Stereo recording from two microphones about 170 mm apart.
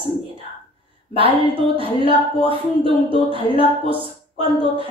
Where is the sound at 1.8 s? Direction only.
30° right (ahead or behind).